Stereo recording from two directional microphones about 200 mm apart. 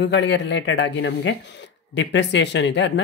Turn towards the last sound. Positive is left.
turn(degrees=65)  # may be behind; listen again after turning